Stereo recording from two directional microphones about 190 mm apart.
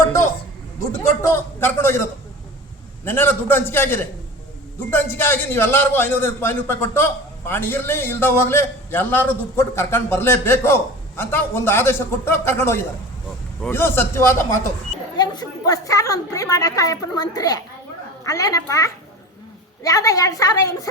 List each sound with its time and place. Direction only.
0.9 s a man's voice: 15° left (ahead or behind)